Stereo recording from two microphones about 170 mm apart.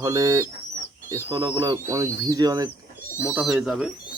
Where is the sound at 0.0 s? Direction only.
20° right (ahead or behind).